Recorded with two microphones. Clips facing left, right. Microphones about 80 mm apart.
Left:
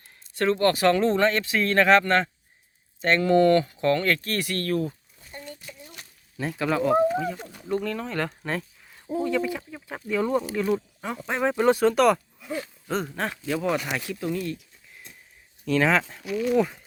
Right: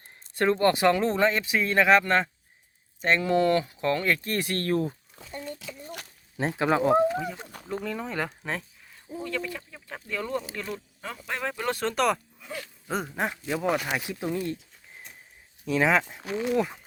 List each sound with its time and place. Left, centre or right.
0.3 s speech: centre
5.2 s crumpling: right
5.6 s a sound: right
6.3 s speech: right
7.1 s speech: centre
9.2 s speech: centre
11.3 s speech: centre
13.4 s speech: centre
15.6 s speech: centre
16.2 s speech: right
16.5 s speech: centre